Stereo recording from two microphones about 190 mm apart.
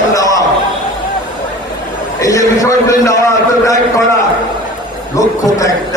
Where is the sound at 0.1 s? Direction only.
20° left (ahead or behind).